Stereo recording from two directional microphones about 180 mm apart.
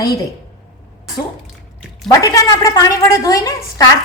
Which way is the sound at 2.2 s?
20° left (ahead or behind).